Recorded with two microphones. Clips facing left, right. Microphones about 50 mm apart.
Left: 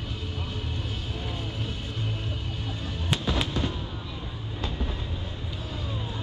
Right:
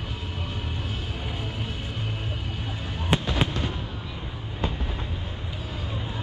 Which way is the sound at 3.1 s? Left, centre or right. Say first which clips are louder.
Right 3 dB; right.